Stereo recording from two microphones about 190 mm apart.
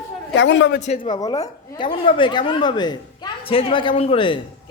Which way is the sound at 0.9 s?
25° left (ahead or behind).